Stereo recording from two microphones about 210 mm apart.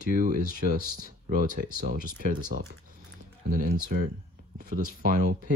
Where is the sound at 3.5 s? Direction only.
40° right (ahead or behind).